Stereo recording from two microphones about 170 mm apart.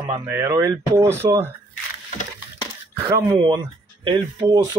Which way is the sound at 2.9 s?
15° right (ahead or behind).